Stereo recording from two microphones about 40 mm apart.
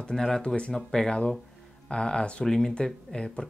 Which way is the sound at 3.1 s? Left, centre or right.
Left.